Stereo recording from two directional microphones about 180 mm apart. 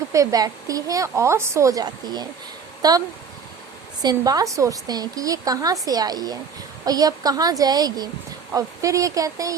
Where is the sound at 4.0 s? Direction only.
20° right (ahead or behind).